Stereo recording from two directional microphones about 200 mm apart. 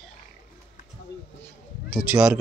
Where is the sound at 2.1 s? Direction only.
10° right (ahead or behind).